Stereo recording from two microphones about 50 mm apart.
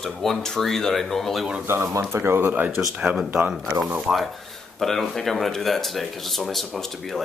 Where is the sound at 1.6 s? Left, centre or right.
Right.